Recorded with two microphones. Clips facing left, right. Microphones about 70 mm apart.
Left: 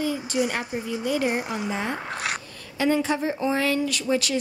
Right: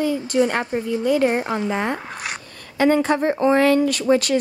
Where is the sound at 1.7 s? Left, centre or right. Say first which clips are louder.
Right 5 dB; right.